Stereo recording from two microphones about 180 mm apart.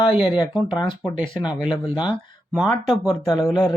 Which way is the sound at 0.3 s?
25° left (ahead or behind).